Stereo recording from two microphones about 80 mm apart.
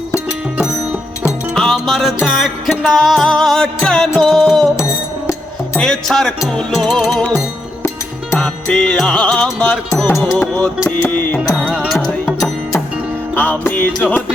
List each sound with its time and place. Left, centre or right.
1.5 s music: centre
5.8 s music: centre
10.4 s music: left
13.3 s music: left